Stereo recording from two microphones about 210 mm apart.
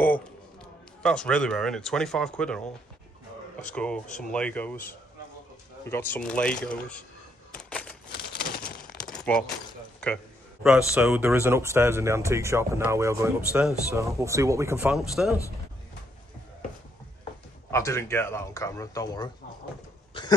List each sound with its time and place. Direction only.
1.0 s speech: 5° left (ahead or behind)
3.7 s speech: 5° left (ahead or behind)
7.5 s typewriter: 5° left (ahead or behind)
8.1 s a sound: 45° left (ahead or behind)
9.1 s a sound: 5° left (ahead or behind)
9.9 s speech: 5° left (ahead or behind)
17.6 s speech: 15° left (ahead or behind)
20.2 s cough: 25° left (ahead or behind)